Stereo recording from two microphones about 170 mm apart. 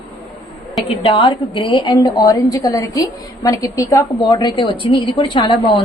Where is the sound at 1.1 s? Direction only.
30° left (ahead or behind).